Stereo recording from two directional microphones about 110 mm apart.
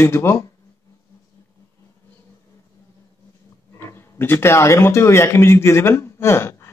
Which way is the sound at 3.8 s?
20° left (ahead or behind).